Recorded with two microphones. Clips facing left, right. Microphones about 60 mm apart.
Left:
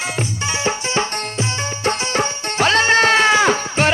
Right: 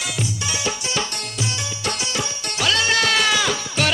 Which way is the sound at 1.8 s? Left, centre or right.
Left.